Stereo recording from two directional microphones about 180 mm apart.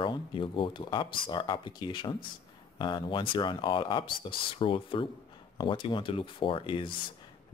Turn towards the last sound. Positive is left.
turn(degrees=30)  # may be behind; listen again after turning